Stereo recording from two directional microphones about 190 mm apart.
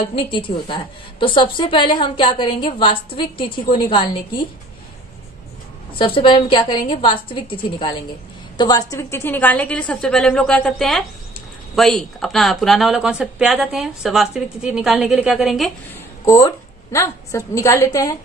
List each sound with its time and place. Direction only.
0.3 s a woman's voice: 25° left (ahead or behind)
5.9 s a woman's voice: 25° left (ahead or behind); by 15.7 s centre (ahead or behind)
16.3 s a woman's voice: 15° left (ahead or behind)